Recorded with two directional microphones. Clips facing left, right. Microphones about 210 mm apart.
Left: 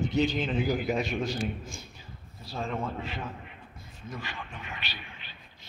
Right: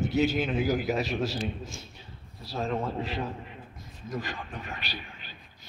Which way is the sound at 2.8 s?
35° right (ahead or behind).